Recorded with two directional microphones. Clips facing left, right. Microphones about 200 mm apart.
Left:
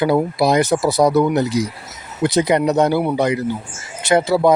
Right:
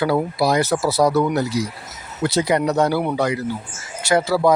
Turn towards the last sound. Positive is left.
turn(degrees=20)  # may be behind; listen again after turning